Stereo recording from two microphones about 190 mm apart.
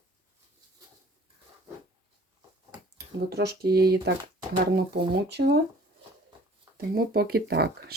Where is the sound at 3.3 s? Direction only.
55° right (ahead or behind).